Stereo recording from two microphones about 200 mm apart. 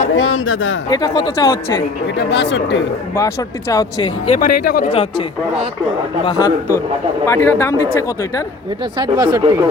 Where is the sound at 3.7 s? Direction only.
20° left (ahead or behind).